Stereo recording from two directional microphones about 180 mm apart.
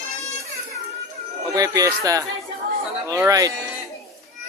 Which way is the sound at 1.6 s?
20° right (ahead or behind).